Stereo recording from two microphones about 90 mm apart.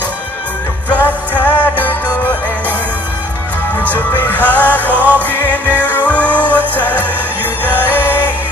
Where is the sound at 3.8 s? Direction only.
20° left (ahead or behind).